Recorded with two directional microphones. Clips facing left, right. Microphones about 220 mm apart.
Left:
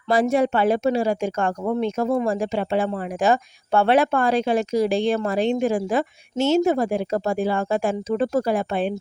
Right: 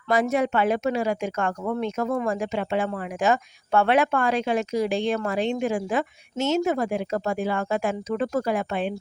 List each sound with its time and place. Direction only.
0.1 s speech: 30° left (ahead or behind)